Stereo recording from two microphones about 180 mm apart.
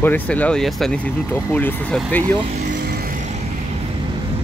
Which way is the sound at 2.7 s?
55° right (ahead or behind).